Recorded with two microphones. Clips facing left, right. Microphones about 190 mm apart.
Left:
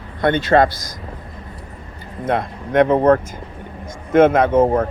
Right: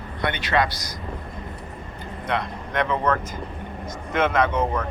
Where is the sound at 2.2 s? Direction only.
50° left (ahead or behind).